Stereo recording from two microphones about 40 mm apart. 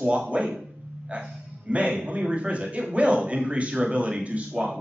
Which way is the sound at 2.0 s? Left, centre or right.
Right.